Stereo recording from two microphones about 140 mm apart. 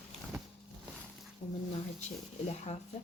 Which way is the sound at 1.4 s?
40° left (ahead or behind).